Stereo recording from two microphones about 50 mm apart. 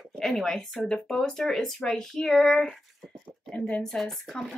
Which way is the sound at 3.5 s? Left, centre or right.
Left.